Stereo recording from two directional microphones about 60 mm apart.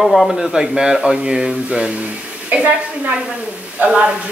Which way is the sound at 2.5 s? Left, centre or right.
Right.